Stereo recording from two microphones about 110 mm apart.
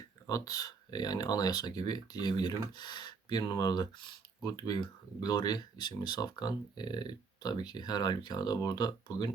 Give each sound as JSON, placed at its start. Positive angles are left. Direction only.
{"t": 0.3, "sound": "speech", "side_deg": 30}